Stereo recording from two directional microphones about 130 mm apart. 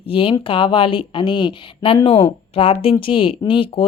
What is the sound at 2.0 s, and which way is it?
Speech, 45° left (ahead or behind).